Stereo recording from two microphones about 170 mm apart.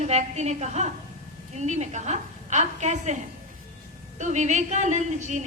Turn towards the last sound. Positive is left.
turn(degrees=-45)  # may be behind; listen again after turning